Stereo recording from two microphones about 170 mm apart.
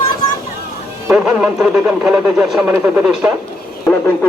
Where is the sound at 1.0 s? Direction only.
5° right (ahead or behind).